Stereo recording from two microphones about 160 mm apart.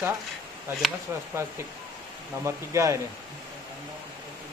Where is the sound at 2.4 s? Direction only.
20° right (ahead or behind).